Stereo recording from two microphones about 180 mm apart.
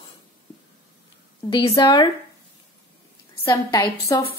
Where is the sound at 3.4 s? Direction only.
20° left (ahead or behind).